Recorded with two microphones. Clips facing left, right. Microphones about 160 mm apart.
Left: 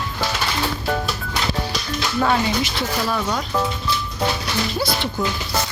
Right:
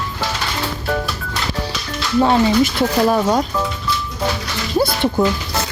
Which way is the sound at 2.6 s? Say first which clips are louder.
Right 8 dB; 50° right (ahead or behind).